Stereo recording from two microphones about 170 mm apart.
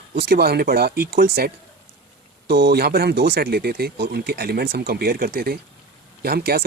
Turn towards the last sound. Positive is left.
turn(degrees=-65)  # may be behind; listen again after turning